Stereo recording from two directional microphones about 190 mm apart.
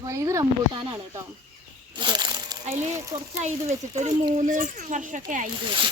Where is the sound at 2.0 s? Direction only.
25° right (ahead or behind).